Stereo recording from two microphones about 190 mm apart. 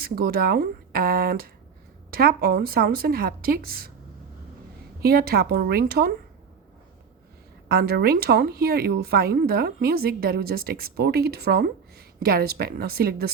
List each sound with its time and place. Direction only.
0.0 s speech: 50° right (ahead or behind)
5.0 s speech: 55° right (ahead or behind)
7.7 s speech: 55° right (ahead or behind)